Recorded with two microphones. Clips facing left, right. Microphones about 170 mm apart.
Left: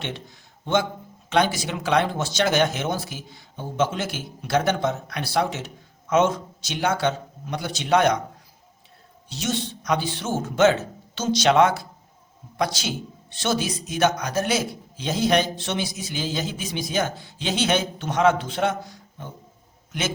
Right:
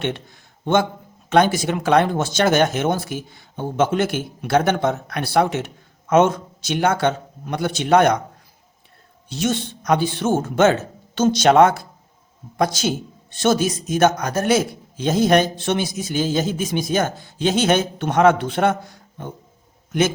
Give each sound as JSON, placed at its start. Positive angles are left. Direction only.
{"t": 0.0, "sound": "a man's voice", "side_deg": -55}
{"t": 9.3, "sound": "a man's voice", "side_deg": -55}